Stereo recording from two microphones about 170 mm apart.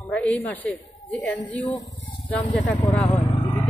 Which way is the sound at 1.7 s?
25° left (ahead or behind).